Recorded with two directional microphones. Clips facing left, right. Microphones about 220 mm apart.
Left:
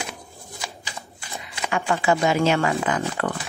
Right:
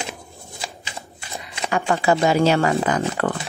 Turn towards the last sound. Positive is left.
turn(degrees=-40)  # may be behind; listen again after turning